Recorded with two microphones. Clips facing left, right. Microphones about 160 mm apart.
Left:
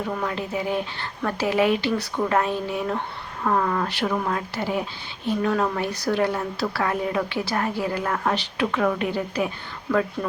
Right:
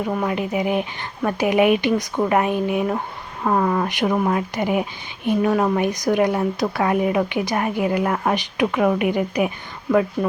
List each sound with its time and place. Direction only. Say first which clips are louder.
0.1 s speech: right 5 dB; 15° right (ahead or behind)